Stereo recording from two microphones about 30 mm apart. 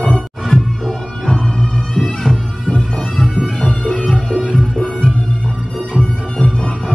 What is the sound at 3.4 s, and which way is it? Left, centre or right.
Music, left.